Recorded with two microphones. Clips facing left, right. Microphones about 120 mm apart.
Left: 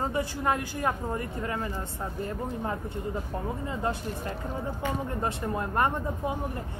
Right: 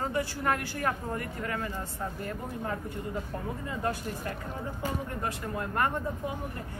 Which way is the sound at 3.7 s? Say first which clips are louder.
Even; 25° left (ahead or behind).